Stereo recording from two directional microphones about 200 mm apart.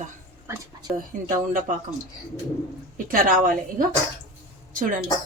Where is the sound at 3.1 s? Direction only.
40° right (ahead or behind).